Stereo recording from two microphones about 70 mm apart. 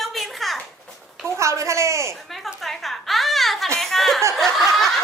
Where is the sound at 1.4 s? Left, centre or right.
Right.